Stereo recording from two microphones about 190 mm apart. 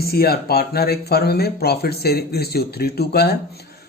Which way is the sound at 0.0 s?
55° left (ahead or behind).